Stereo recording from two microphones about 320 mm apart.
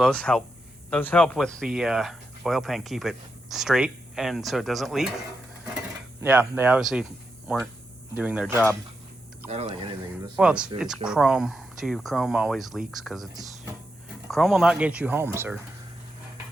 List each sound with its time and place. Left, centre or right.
0.0 s speech: centre
6.2 s speech: centre
9.5 s speech: centre
10.3 s speech: centre